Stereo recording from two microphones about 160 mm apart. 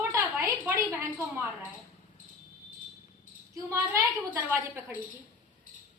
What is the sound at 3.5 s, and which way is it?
A woman's voice, 20° right (ahead or behind).